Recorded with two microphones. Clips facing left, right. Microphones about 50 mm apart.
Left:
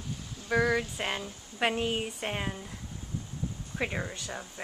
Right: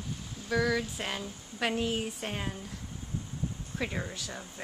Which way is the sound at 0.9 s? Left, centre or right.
Centre.